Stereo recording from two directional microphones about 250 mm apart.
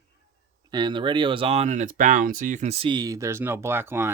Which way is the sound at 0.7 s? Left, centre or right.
Centre.